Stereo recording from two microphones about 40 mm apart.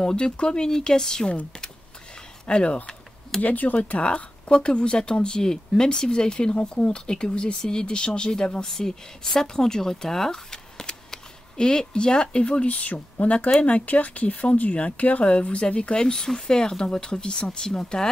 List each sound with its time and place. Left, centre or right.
0.0 s speech: left
2.4 s speech: left
3.3 s speech: left
4.0 s speech: left